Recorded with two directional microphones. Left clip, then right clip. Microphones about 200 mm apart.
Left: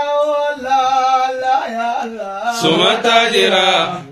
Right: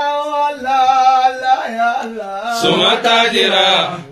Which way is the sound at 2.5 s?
35° left (ahead or behind).